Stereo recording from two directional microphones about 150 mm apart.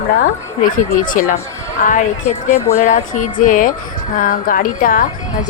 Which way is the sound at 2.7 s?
55° left (ahead or behind).